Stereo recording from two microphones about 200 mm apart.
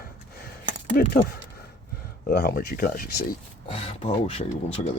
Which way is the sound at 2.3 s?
50° left (ahead or behind).